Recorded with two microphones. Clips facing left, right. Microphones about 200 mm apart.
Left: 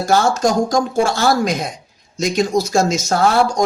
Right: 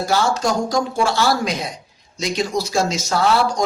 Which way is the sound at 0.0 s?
50° left (ahead or behind).